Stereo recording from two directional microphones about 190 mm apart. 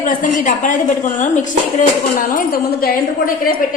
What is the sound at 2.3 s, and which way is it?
Speech, 50° left (ahead or behind).